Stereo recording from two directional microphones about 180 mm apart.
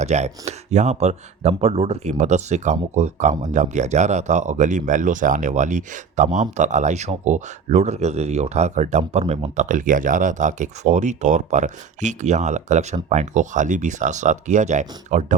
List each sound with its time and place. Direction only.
0.0 s speech: 40° right (ahead or behind)